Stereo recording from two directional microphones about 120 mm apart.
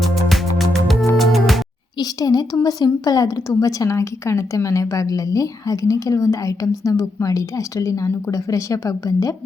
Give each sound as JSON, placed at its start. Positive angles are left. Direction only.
{"t": 0.3, "sound": "music", "side_deg": 0}
{"t": 2.0, "sound": "a woman's voice", "side_deg": 30}